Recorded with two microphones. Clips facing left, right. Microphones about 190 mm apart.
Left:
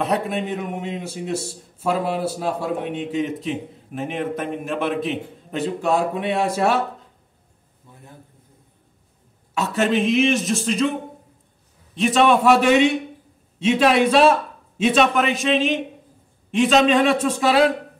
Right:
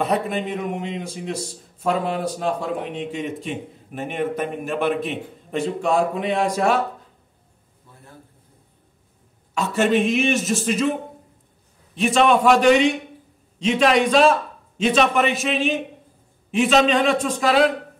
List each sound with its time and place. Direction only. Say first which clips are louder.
0.0 s a man's voice: even; centre (ahead or behind)
7.9 s a sound: left 2 dB; 20° left (ahead or behind)
9.5 s a man's voice: right 1 dB; centre (ahead or behind)
11.9 s a man's voice: even; centre (ahead or behind)